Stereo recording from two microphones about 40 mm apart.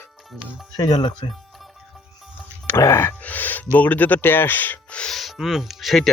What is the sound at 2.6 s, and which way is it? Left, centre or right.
Speech, left.